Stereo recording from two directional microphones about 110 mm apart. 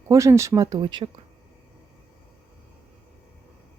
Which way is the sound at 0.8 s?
50° right (ahead or behind).